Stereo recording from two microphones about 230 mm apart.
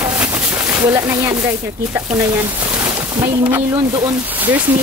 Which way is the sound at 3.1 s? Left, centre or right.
Centre.